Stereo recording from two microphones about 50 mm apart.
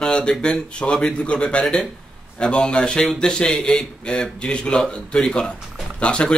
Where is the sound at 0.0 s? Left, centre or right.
Centre.